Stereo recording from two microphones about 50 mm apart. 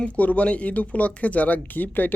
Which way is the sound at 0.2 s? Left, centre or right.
Left.